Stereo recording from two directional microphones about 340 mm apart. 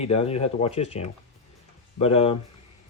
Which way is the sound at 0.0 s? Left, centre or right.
Centre.